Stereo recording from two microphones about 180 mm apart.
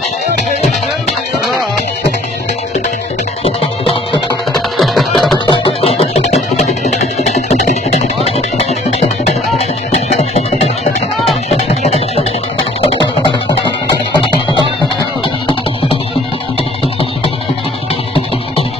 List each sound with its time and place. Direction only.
3.4 s music: 30° left (ahead or behind)
4.6 s music: centre (ahead or behind)
5.5 s music: 30° left (ahead or behind)
9.9 s music: 35° left (ahead or behind)